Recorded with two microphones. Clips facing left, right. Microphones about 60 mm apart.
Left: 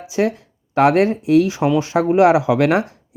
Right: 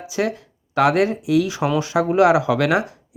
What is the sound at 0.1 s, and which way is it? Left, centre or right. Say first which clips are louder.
Speech: left 4 dB; left.